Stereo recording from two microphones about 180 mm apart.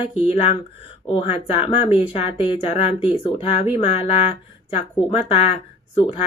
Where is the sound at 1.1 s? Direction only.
30° left (ahead or behind).